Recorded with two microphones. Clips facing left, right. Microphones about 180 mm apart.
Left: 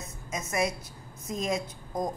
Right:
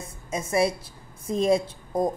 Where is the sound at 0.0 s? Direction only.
30° right (ahead or behind).